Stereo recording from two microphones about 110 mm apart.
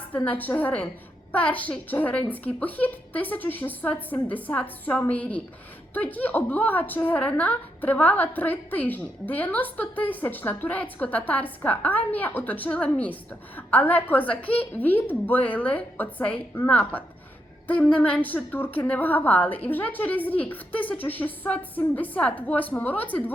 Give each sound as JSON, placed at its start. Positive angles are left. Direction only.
{"t": 0.3, "sound": "a woman's voice", "side_deg": 15}